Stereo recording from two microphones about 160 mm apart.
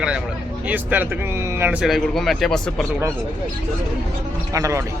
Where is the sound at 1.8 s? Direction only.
Centre (ahead or behind).